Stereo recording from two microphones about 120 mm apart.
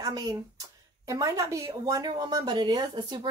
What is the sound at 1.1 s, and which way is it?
Speech, 30° right (ahead or behind).